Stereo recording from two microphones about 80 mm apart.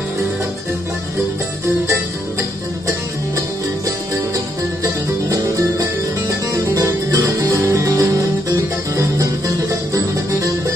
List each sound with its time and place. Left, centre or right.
6.2 s music: right